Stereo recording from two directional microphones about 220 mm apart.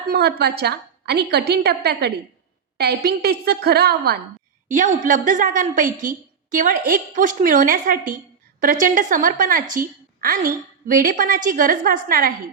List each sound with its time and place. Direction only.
0.1 s a woman's voice: 45° right (ahead or behind)